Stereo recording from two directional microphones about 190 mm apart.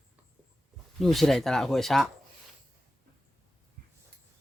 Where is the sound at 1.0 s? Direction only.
Centre (ahead or behind).